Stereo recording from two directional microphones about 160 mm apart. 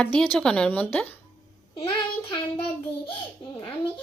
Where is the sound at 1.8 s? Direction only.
35° left (ahead or behind).